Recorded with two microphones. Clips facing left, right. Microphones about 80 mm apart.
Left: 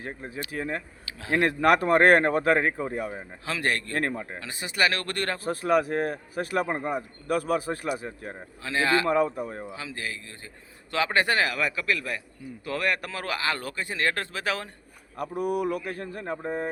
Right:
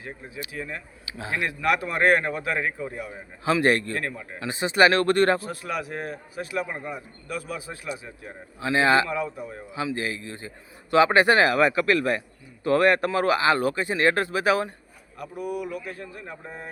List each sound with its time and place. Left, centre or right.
0.5 s speech: left
3.4 s speech: right
3.9 s a man's voice: left
4.4 s speech: right
5.4 s speech: left
8.6 s speech: right
9.0 s speech: left
9.7 s speech: right
15.2 s speech: left